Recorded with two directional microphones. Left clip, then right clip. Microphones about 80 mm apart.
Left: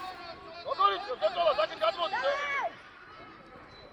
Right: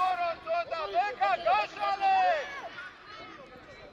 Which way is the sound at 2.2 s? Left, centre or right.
Left.